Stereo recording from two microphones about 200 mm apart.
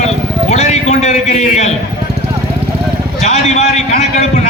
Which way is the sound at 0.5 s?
35° left (ahead or behind).